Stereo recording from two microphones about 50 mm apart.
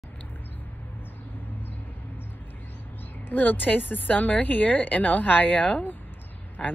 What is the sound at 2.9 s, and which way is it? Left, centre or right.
Speech, left.